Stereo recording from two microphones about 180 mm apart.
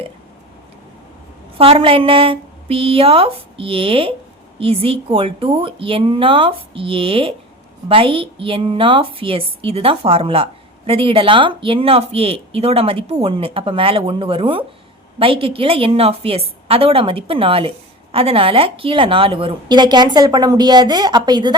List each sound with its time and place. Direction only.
1.5 s a woman's voice: 30° right (ahead or behind)